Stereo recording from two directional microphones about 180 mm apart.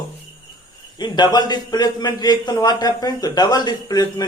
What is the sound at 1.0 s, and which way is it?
Speech, 25° left (ahead or behind).